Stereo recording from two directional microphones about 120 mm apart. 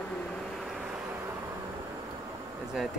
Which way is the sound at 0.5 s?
5° right (ahead or behind).